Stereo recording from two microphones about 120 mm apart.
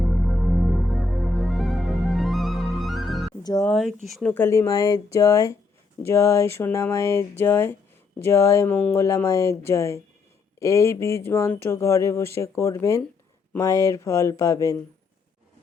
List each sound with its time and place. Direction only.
0.0 s music: centre (ahead or behind)
3.7 s speech: 5° left (ahead or behind)
4.4 s speech: 25° left (ahead or behind)